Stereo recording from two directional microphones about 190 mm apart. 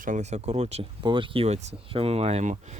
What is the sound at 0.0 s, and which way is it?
Speech, 40° right (ahead or behind).